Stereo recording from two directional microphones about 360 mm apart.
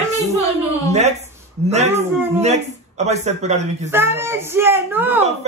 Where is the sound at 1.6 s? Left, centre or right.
Centre.